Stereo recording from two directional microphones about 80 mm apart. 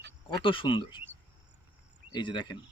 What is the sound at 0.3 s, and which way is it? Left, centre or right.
Speech, left.